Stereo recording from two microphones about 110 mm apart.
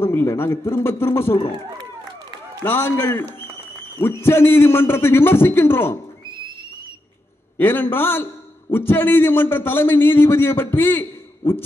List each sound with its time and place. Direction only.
0.0 s a man's voice: 20° left (ahead or behind)
2.6 s a man's voice: 20° left (ahead or behind)
7.5 s a man's voice: 20° left (ahead or behind)